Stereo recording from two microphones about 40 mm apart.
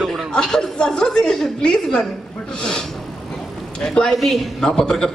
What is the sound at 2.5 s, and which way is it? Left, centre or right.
Vehicle, left.